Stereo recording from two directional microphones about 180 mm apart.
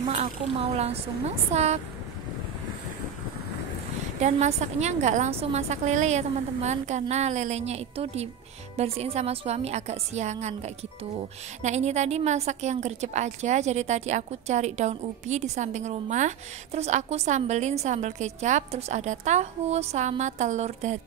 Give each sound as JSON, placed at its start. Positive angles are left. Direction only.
{"t": 0.0, "sound": "a woman's voice", "side_deg": -35}
{"t": 4.2, "sound": "a woman's voice", "side_deg": -40}